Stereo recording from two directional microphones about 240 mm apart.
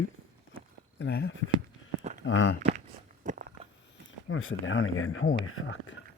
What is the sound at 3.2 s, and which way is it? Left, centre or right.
Biting, right.